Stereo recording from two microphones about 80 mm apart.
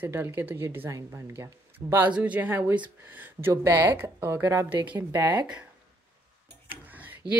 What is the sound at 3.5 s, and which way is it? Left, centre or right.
A woman's voice, right.